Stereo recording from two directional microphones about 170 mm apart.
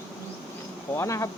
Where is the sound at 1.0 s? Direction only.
20° left (ahead or behind).